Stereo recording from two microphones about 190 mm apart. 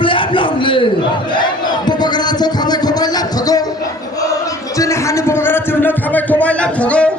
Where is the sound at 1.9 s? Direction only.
20° left (ahead or behind).